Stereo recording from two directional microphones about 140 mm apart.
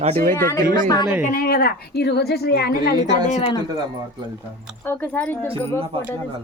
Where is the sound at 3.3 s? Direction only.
50° left (ahead or behind).